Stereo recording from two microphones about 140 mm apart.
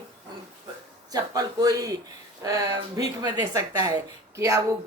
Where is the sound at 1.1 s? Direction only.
25° right (ahead or behind).